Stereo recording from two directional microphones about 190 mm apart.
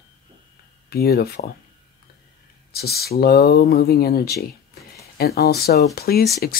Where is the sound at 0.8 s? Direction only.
55° left (ahead or behind).